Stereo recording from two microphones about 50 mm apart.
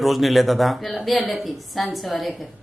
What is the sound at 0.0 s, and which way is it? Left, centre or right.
A man's voice, centre.